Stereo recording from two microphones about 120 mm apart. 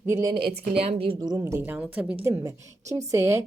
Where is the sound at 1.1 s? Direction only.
35° right (ahead or behind).